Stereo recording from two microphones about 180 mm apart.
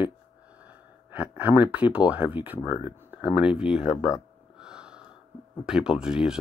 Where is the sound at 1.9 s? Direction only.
5° right (ahead or behind).